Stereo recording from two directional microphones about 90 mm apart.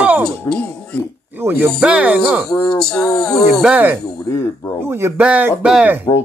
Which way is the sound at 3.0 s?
45° left (ahead or behind).